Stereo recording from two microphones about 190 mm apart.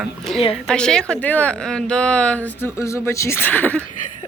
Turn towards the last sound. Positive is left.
turn(degrees=10)  # may be behind; listen again after turning